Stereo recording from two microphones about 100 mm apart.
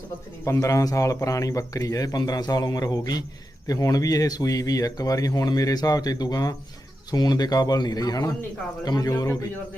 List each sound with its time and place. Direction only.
0.4 s speech: 30° left (ahead or behind)